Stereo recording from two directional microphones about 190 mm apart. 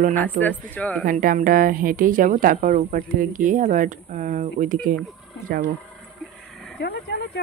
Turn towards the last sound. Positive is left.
turn(degrees=60)  # may be behind; listen again after turning